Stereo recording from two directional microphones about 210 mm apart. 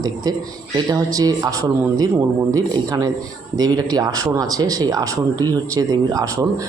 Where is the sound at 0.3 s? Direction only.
20° right (ahead or behind).